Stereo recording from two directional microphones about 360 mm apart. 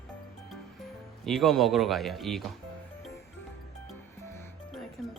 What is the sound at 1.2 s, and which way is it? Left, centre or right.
Speech, centre.